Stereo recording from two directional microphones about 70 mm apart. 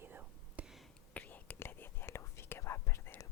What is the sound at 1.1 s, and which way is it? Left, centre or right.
Whispering, left.